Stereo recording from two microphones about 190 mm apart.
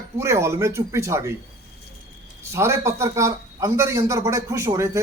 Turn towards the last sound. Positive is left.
turn(degrees=-15)  # may be behind; listen again after turning